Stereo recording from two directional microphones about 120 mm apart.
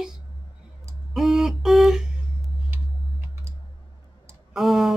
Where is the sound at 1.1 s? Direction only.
Centre (ahead or behind).